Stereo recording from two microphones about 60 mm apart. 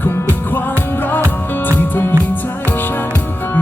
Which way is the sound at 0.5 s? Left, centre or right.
Left.